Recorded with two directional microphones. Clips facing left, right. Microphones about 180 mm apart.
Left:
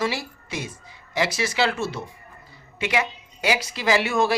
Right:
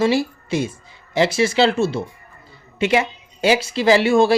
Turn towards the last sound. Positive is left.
turn(degrees=-30)  # may be behind; listen again after turning